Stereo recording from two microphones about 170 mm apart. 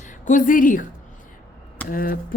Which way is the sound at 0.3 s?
50° left (ahead or behind).